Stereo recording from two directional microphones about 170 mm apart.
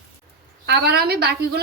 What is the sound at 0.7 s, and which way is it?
Speech, 70° right (ahead or behind).